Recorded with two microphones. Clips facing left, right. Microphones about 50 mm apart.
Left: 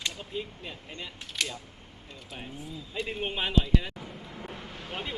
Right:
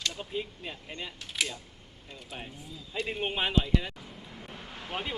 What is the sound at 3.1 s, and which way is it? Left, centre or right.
Speech, centre.